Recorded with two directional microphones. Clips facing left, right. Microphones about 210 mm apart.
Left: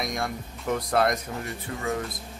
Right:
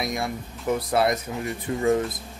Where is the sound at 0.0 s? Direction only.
5° right (ahead or behind).